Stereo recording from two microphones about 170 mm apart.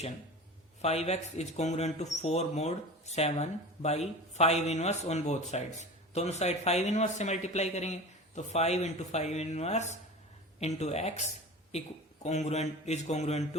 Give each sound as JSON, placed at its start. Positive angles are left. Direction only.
{"t": 0.8, "sound": "speech", "side_deg": 40}
{"t": 12.2, "sound": "speech", "side_deg": 40}